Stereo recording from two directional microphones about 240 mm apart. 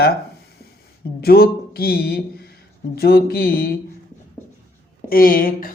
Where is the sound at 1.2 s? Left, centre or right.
Left.